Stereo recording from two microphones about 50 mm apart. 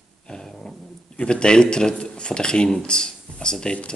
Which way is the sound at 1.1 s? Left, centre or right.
Centre.